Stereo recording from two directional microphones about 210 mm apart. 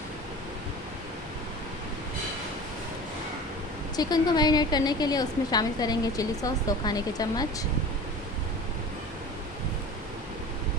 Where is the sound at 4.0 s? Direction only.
20° left (ahead or behind).